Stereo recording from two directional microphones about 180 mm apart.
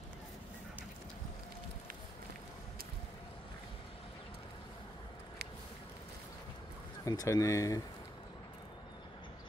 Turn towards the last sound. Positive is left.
turn(degrees=20)  # may be behind; listen again after turning